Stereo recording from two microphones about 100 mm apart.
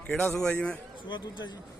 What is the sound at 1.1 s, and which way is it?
Speech, 45° left (ahead or behind).